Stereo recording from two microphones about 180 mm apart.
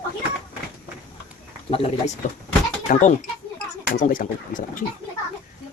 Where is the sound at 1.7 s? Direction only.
35° left (ahead or behind).